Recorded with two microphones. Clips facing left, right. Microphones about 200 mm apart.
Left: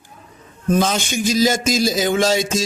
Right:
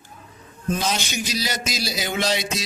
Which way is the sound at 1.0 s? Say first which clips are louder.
Left 10 dB; 50° left (ahead or behind).